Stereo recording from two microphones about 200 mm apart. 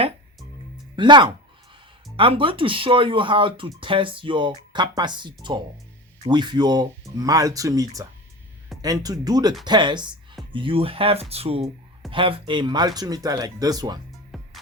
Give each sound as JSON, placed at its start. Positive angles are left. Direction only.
{"t": 0.9, "sound": "speech", "side_deg": -25}
{"t": 14.3, "sound": "music", "side_deg": 0}